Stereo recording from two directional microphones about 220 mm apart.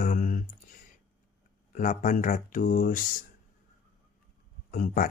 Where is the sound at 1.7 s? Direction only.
35° left (ahead or behind).